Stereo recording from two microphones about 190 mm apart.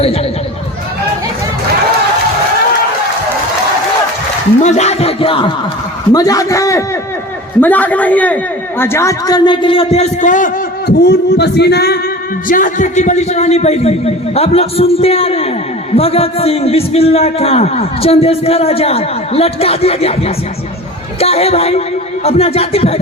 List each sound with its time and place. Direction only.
4.6 s a man's voice: 35° left (ahead or behind); by 11.9 s 60° left (ahead or behind)
12.5 s a man's voice: 45° left (ahead or behind)